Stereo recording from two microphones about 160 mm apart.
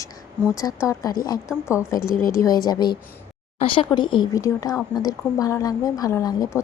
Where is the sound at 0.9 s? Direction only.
25° left (ahead or behind).